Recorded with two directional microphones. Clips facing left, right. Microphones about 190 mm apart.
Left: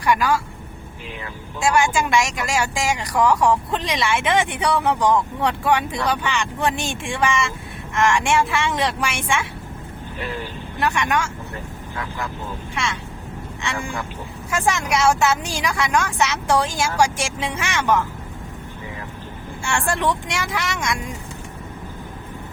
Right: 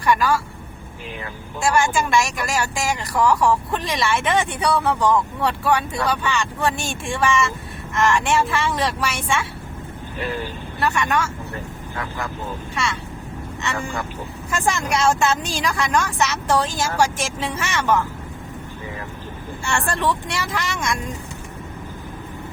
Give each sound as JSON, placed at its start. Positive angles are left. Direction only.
{"t": 0.0, "sound": "a woman's voice", "side_deg": 15}
{"t": 1.6, "sound": "speech", "side_deg": 15}
{"t": 10.8, "sound": "speech", "side_deg": 15}
{"t": 14.6, "sound": "speech", "side_deg": 10}
{"t": 19.6, "sound": "speech", "side_deg": 10}